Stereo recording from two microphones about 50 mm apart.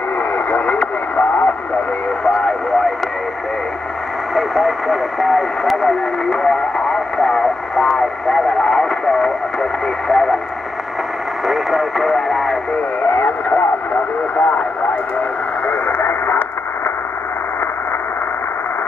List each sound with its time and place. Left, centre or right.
0.5 s radio: left
2.4 s radio: centre
4.4 s radio: centre
11.4 s radio: centre
12.7 s radio: left